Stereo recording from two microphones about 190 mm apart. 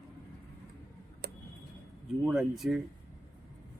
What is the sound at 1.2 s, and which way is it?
Tick-tock, 55° right (ahead or behind).